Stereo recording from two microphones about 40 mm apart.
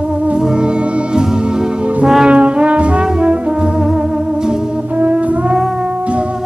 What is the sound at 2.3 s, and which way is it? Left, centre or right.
Brass instrument, right.